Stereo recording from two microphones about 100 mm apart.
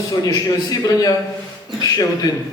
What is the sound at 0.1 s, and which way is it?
A man's voice, 40° left (ahead or behind).